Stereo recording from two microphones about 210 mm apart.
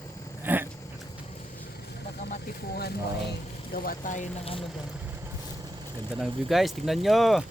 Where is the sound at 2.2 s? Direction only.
50° left (ahead or behind).